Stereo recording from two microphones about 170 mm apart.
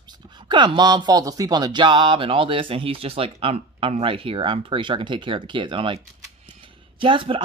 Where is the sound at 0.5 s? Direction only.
25° right (ahead or behind).